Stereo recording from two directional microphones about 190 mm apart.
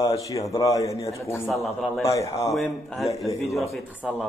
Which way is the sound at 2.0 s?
15° left (ahead or behind).